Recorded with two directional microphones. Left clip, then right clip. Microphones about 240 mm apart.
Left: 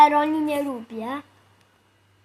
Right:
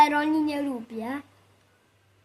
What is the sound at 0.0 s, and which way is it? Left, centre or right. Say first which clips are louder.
A woman's voice: left 4 dB; centre.